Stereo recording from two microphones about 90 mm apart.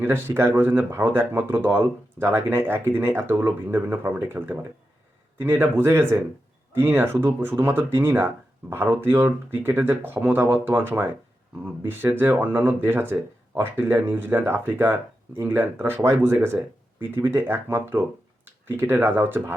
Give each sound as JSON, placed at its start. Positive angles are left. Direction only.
{"t": 0.0, "sound": "speech", "side_deg": -25}